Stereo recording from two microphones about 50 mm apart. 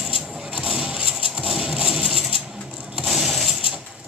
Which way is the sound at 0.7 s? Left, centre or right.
Centre.